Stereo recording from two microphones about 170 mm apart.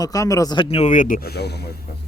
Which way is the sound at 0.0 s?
20° left (ahead or behind).